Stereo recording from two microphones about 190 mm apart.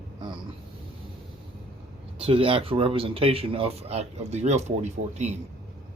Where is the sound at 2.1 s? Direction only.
30° right (ahead or behind).